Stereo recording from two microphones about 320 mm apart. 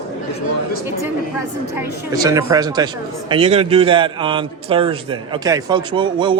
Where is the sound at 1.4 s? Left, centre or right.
Centre.